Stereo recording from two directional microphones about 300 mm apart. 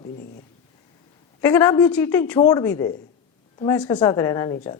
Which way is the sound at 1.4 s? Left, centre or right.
Centre.